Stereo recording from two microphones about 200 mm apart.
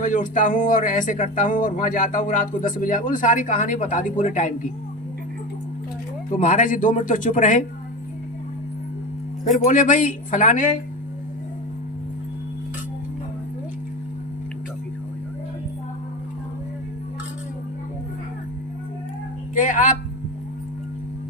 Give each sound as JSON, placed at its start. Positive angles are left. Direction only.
{"t": 0.0, "sound": "speech", "side_deg": 40}
{"t": 6.3, "sound": "speech", "side_deg": 40}
{"t": 9.4, "sound": "speech", "side_deg": 40}
{"t": 19.5, "sound": "a sound", "side_deg": 40}